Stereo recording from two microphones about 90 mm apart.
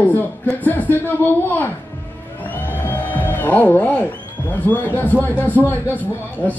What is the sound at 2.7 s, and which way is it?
A man's voice, 20° left (ahead or behind).